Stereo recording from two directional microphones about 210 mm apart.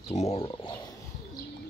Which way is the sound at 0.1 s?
30° left (ahead or behind).